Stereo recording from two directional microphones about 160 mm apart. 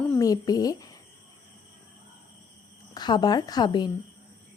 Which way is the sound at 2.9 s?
25° left (ahead or behind).